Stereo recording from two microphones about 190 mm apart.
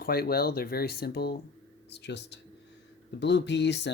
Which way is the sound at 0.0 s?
55° left (ahead or behind).